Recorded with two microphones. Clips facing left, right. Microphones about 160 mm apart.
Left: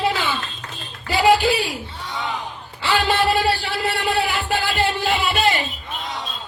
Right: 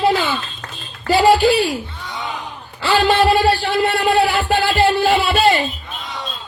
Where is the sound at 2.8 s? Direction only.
35° right (ahead or behind).